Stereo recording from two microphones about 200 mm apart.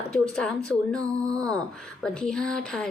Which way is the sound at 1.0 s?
20° right (ahead or behind).